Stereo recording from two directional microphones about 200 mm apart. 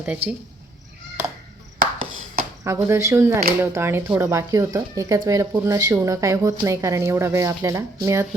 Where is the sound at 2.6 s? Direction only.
15° right (ahead or behind).